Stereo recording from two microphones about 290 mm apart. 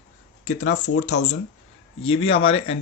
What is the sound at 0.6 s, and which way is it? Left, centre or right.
Speech, left.